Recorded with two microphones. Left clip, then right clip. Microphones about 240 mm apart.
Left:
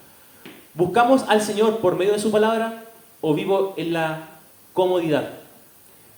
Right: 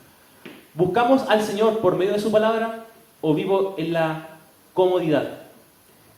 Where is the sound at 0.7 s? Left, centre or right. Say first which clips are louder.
Left 1 dB; left.